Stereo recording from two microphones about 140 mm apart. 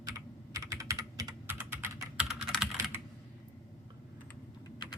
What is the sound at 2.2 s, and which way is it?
Computer keyboard, centre (ahead or behind).